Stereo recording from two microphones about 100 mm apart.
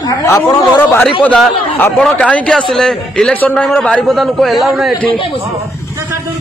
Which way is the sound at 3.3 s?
15° left (ahead or behind).